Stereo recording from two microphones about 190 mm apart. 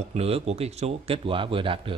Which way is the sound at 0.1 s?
35° right (ahead or behind).